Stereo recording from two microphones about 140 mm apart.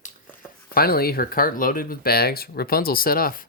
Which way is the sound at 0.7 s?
90° left.